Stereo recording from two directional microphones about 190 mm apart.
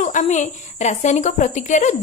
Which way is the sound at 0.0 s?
40° left (ahead or behind).